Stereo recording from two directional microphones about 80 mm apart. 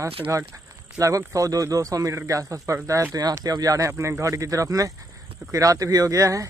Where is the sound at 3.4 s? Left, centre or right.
Right.